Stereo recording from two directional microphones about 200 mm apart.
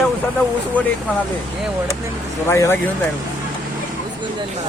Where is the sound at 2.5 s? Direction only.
15° left (ahead or behind).